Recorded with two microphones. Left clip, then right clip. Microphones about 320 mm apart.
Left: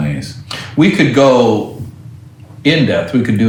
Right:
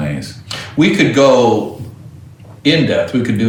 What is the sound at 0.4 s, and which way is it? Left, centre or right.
Speech, left.